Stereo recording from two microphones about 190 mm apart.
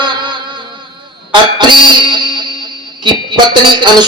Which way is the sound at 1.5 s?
25° right (ahead or behind).